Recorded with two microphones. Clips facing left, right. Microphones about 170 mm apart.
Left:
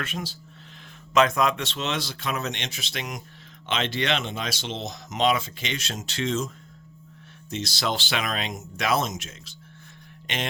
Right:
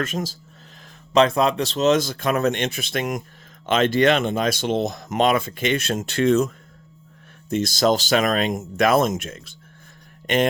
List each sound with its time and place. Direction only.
0.0 s speech: 40° right (ahead or behind)
1.1 s speech: 30° right (ahead or behind); by 6.5 s 60° right (ahead or behind)
7.5 s speech: 50° right (ahead or behind)